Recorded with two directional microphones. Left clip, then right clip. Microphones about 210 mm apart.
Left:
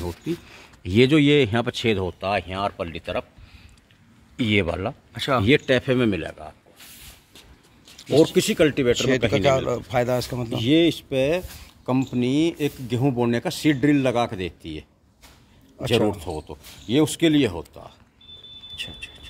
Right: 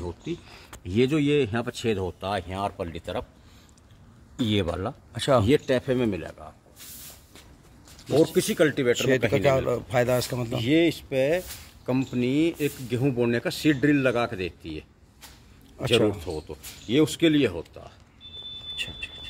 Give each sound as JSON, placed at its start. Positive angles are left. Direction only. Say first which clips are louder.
{"t": 0.0, "sound": "speech", "louder": "left 4 dB", "side_deg": 40}
{"t": 2.1, "sound": "speech", "louder": "left 5 dB", "side_deg": 10}
{"t": 4.4, "sound": "speech", "louder": "left 4 dB", "side_deg": 10}
{"t": 5.1, "sound": "speech", "louder": "right 1 dB", "side_deg": -20}
{"t": 5.7, "sound": "speech", "louder": "left 4 dB", "side_deg": 35}
{"t": 8.4, "sound": "speech", "louder": "left 3 dB", "side_deg": 35}
{"t": 9.3, "sound": "speech", "louder": "left 2 dB", "side_deg": -5}
{"t": 10.6, "sound": "speech", "louder": "left 3 dB", "side_deg": 40}
{"t": 16.1, "sound": "speech", "louder": "left 2 dB", "side_deg": 40}
{"t": 18.8, "sound": "a sound", "louder": "even", "side_deg": 5}